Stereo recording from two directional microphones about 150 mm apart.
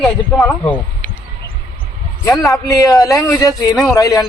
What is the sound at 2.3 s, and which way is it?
Speech, centre (ahead or behind).